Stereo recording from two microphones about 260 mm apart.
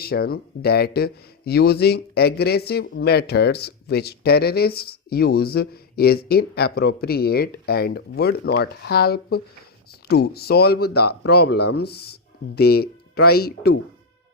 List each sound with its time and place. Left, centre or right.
0.0 s speech: left